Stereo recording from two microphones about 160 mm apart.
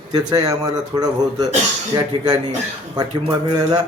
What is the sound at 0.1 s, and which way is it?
A man's voice, 25° right (ahead or behind).